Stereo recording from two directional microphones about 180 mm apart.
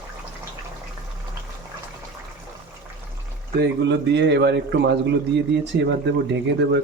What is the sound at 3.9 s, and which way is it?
Speech, 70° right (ahead or behind).